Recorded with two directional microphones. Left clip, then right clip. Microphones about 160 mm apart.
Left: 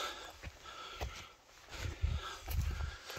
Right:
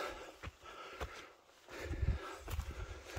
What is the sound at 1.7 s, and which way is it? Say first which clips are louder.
Wild animals: right 1 dB; 40° right (ahead or behind).